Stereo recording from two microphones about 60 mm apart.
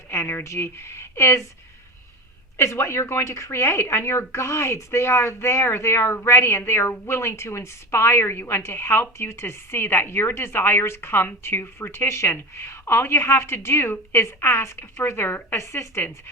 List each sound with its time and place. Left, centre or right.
0.1 s a woman's voice: left
2.6 s a woman's voice: left
15.5 s a woman's voice: left